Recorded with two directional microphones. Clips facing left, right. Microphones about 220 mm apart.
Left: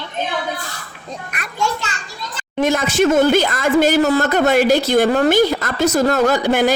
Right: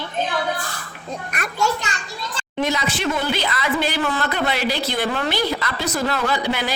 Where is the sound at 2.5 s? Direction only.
50° left (ahead or behind).